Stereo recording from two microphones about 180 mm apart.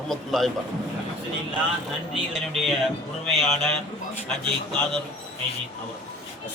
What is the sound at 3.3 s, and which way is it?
Speech, centre (ahead or behind).